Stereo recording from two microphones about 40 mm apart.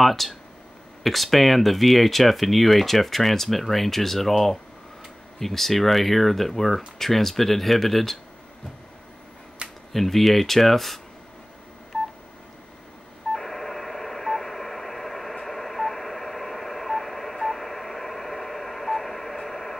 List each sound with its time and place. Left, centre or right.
0.0 s speech: centre
9.6 s a sound: right
9.9 s speech: centre
13.3 s radio: centre